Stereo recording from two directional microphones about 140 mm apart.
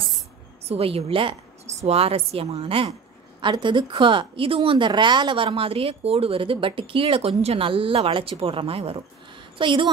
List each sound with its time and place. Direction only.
0.7 s a woman's voice: 45° right (ahead or behind)